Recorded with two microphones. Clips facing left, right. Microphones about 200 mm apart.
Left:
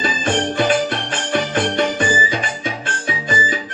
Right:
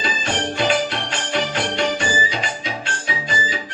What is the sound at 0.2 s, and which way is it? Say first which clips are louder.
Music: left 4 dB; 50° left (ahead or behind).